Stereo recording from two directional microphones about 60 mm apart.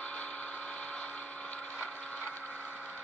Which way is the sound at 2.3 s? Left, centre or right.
Left.